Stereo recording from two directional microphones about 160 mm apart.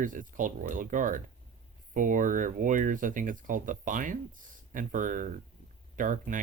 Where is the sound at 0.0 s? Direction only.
55° right (ahead or behind).